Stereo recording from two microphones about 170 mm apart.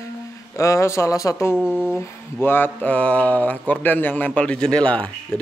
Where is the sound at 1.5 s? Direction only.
5° right (ahead or behind).